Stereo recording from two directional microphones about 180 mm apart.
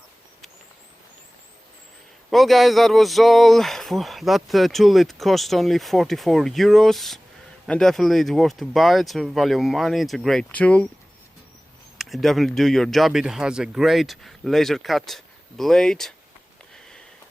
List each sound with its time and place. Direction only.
2.3 s speech: centre (ahead or behind)
11.9 s speech: centre (ahead or behind)